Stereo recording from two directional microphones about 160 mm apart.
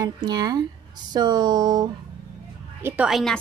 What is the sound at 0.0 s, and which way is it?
Speech, 25° right (ahead or behind).